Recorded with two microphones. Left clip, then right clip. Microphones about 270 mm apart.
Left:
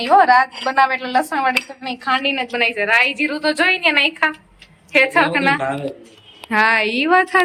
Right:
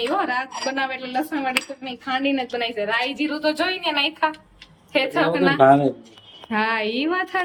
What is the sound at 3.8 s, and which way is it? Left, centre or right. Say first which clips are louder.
A woman's voice: left 6 dB; centre.